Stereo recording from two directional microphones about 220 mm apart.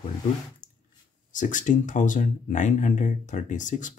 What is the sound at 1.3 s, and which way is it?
Speech, 35° left (ahead or behind).